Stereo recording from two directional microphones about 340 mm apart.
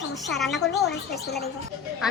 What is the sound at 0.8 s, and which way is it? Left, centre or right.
Speech, left.